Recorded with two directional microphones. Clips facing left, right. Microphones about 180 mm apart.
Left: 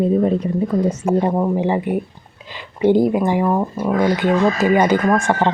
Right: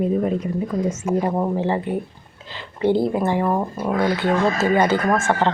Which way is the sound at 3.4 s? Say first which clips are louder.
Left 3 dB; centre (ahead or behind).